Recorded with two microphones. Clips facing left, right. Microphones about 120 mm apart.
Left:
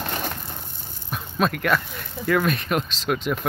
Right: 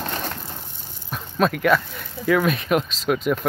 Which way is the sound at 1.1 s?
Centre (ahead or behind).